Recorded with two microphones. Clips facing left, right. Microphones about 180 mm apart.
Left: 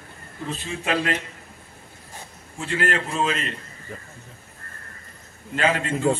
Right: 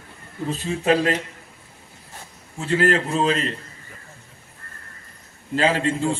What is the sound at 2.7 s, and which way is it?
Speech, 35° right (ahead or behind).